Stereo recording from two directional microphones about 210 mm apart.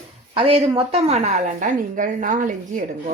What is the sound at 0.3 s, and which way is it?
A woman's voice, 25° right (ahead or behind).